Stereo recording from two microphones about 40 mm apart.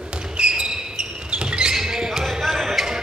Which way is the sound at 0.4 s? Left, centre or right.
Right.